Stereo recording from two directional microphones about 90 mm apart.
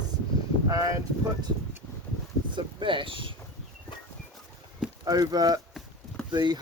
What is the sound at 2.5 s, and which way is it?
Speech, 65° right (ahead or behind).